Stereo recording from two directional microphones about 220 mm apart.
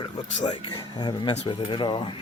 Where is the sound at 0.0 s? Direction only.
20° left (ahead or behind).